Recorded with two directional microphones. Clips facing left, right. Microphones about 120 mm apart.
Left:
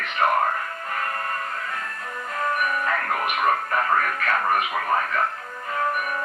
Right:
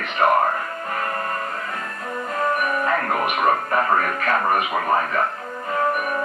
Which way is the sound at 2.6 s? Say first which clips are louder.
Right 3 dB; 30° right (ahead or behind).